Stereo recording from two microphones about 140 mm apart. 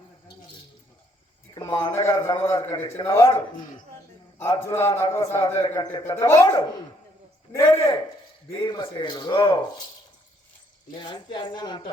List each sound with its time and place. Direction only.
1.8 s a man's voice: 20° left (ahead or behind)
8.5 s speech: 35° left (ahead or behind)
10.9 s speech: 35° left (ahead or behind)